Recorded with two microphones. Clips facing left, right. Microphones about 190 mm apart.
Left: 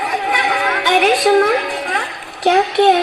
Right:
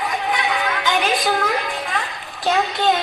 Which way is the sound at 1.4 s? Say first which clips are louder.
Left 6 dB; 70° left (ahead or behind).